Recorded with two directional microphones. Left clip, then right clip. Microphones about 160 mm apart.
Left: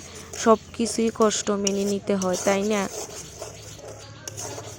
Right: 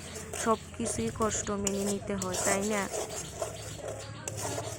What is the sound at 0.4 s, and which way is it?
Speech, 30° left (ahead or behind).